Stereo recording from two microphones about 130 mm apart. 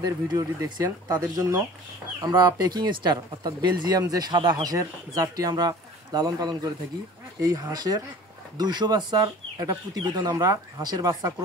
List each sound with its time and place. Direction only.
0.0 s speech: 30° right (ahead or behind)